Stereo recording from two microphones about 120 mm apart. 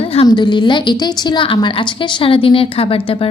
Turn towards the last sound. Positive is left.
turn(degrees=50)  # may be behind; listen again after turning